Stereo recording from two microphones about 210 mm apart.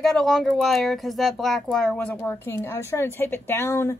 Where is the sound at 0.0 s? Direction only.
Centre (ahead or behind).